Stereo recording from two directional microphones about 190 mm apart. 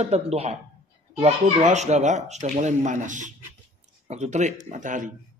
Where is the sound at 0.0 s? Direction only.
35° right (ahead or behind).